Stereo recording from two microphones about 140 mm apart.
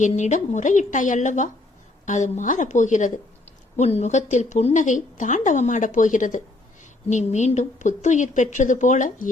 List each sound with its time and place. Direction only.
0.0 s a woman's voice: 60° left (ahead or behind)
3.8 s a woman's voice: 50° left (ahead or behind); by 9.3 s 65° left (ahead or behind)